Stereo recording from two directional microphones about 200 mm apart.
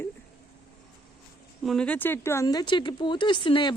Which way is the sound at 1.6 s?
Centre (ahead or behind).